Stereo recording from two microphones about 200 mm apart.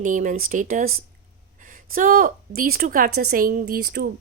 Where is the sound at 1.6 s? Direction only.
40° right (ahead or behind).